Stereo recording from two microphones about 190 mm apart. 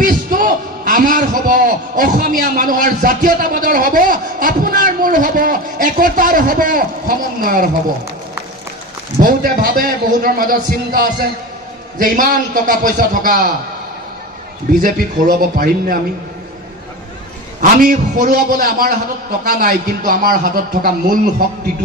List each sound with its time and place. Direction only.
0.0 s a man's voice: 45° right (ahead or behind)
9.2 s a man's voice: 50° right (ahead or behind)
14.7 s a man's voice: 45° right (ahead or behind)
17.6 s a man's voice: 45° right (ahead or behind)